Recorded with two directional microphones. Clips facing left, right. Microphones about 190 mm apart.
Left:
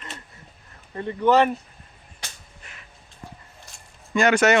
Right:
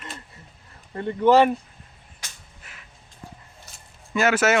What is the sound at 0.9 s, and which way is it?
Speech, 5° right (ahead or behind).